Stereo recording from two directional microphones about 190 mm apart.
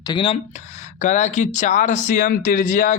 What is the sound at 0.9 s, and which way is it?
Speech, 40° left (ahead or behind).